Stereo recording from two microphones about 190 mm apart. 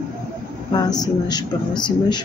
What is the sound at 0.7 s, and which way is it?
Speech, 20° left (ahead or behind).